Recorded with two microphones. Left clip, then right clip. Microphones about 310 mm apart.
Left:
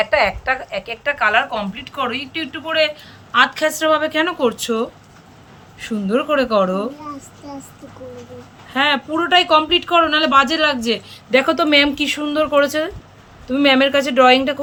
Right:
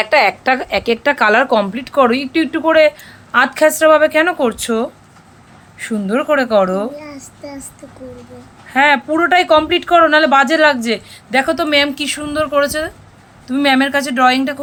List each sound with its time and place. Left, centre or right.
0.0 s speech: right; by 6.8 s centre
8.7 s speech: centre